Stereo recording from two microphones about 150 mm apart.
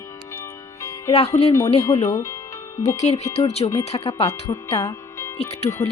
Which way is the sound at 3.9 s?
35° left (ahead or behind).